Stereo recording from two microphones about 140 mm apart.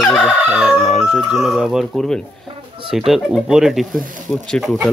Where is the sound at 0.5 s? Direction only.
5° right (ahead or behind).